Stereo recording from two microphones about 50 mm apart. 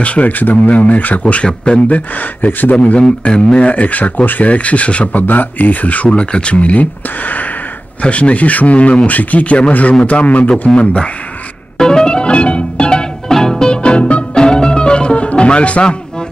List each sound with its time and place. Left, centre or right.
0.0 s speech: left
5.2 s speech: left
11.8 s music: centre